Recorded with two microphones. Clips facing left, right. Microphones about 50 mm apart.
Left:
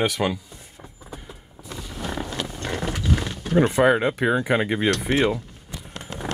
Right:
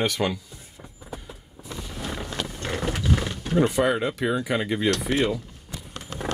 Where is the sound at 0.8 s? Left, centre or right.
Centre.